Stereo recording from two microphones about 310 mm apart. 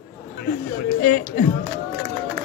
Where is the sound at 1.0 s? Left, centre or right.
Left.